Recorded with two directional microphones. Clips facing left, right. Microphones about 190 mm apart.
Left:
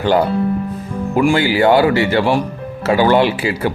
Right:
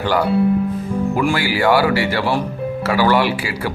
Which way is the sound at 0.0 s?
25° left (ahead or behind).